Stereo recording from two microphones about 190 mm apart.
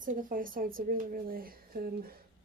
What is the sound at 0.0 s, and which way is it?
A woman's voice, 45° right (ahead or behind).